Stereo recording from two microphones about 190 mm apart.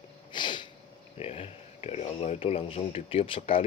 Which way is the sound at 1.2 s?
30° left (ahead or behind).